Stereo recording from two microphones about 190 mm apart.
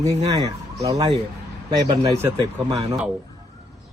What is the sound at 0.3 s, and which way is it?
Speech, 20° right (ahead or behind).